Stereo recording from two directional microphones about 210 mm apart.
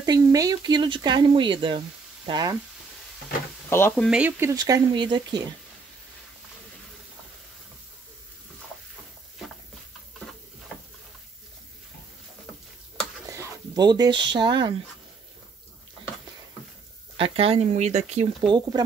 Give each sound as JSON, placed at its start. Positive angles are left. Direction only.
{"t": 0.0, "sound": "speech", "side_deg": -15}
{"t": 3.6, "sound": "speech", "side_deg": 10}
{"t": 4.1, "sound": "speech", "side_deg": -10}
{"t": 13.3, "sound": "speech", "side_deg": -15}
{"t": 17.2, "sound": "speech", "side_deg": -25}